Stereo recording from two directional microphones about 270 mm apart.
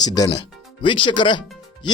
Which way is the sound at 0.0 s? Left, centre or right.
Centre.